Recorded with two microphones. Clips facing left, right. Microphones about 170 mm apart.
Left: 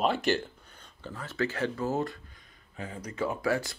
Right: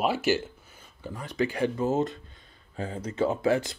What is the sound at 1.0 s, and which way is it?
Speech, 15° right (ahead or behind).